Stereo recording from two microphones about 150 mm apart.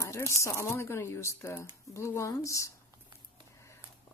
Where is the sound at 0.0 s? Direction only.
20° left (ahead or behind).